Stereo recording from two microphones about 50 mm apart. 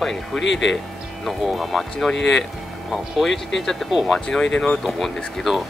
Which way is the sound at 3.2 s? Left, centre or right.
Centre.